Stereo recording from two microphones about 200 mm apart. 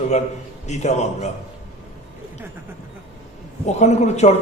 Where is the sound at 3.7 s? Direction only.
35° left (ahead or behind).